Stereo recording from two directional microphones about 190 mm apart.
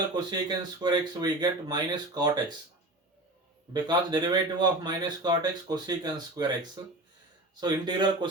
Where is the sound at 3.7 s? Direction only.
20° right (ahead or behind).